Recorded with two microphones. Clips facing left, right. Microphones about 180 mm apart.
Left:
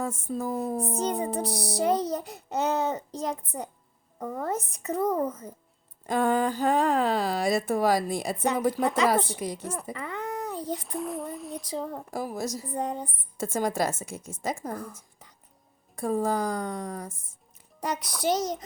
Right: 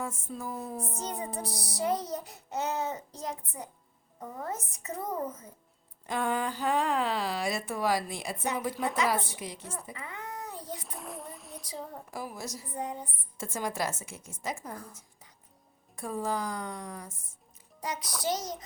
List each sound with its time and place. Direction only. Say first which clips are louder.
0.0 s a woman's voice: left 7 dB; 35° left (ahead or behind)
0.9 s child singing: left 8 dB; 65° left (ahead or behind)
4.2 s child singing: left 7 dB; 85° left; by 5.1 s 70° left (ahead or behind)
6.1 s a woman's voice: left 6 dB; 40° left (ahead or behind)
9.9 s cat: left 8 dB; 70° left (ahead or behind)
10.8 s a child's voice: left 10 dB; centre (ahead or behind)
12.1 s a woman's voice: left 7 dB; 40° left (ahead or behind)
12.7 s child singing: left 4 dB; 70° left (ahead or behind)
13.3 s a woman's voice: left 7 dB; 40° left (ahead or behind)
16.0 s a woman's voice: left 6 dB; 40° left (ahead or behind)
18.3 s child singing: left 6 dB; 70° left (ahead or behind)